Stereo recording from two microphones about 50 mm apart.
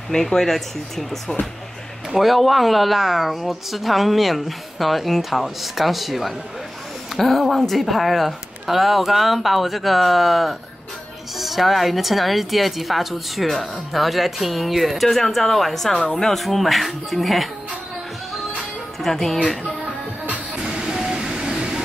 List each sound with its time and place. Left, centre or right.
0.1 s a woman's voice: centre
16.0 s speech: centre
16.3 s a woman's voice: centre
18.9 s a woman's voice: centre
20.5 s vehicle: centre